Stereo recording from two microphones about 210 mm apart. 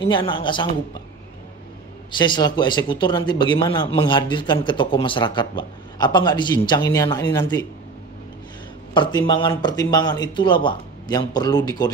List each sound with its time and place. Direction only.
0.1 s speech: 20° left (ahead or behind)
2.1 s speech: 20° left (ahead or behind)
8.9 s speech: 20° left (ahead or behind)